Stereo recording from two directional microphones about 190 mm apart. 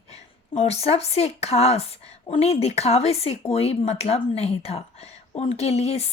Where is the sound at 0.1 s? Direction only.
35° left (ahead or behind).